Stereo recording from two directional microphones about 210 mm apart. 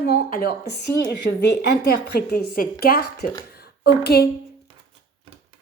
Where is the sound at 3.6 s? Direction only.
50° left (ahead or behind).